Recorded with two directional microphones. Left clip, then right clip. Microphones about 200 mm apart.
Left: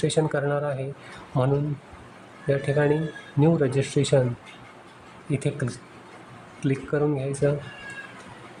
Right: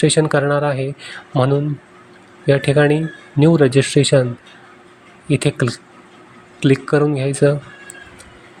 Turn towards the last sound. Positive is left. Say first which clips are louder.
# right 8 dB
turn(degrees=-20)  # may be behind; listen again after turning